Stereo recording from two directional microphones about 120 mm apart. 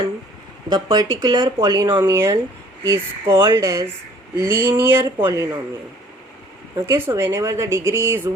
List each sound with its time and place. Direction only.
0.7 s speech: 35° right (ahead or behind)
2.1 s speech: 20° right (ahead or behind)
6.9 s speech: 20° right (ahead or behind)